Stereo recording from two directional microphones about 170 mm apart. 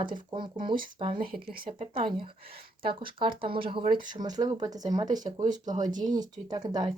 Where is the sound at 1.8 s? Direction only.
30° right (ahead or behind).